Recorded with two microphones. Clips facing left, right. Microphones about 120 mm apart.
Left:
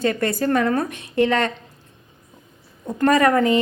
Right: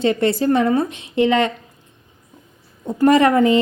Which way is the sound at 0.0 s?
25° right (ahead or behind).